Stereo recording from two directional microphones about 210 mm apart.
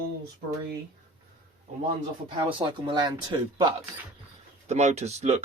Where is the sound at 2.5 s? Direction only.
25° right (ahead or behind).